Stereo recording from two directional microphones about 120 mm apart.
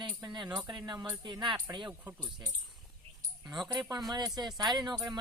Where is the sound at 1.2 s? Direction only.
40° right (ahead or behind).